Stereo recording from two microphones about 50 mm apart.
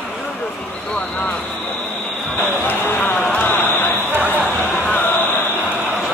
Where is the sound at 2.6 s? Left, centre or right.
Left.